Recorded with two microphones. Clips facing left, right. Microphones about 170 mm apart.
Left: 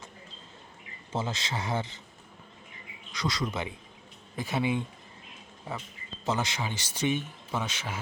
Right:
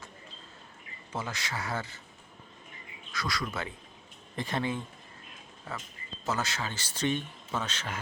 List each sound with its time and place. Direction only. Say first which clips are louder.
1.1 s speech: left 4 dB; 25° left (ahead or behind)
3.1 s speech: left 3 dB; 20° left (ahead or behind)
4.4 s speech: left 3 dB; 5° left (ahead or behind)